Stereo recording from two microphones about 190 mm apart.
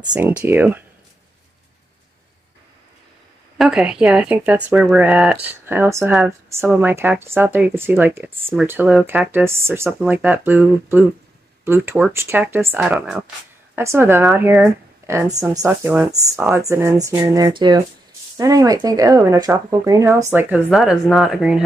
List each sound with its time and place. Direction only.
0.1 s speech: 10° right (ahead or behind)
3.5 s a woman's voice: centre (ahead or behind)